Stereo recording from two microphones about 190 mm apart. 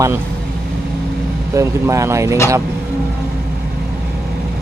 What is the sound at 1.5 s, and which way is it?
Speech, 15° right (ahead or behind).